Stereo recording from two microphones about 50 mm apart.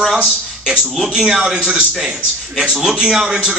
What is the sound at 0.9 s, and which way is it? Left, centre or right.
Speech, centre.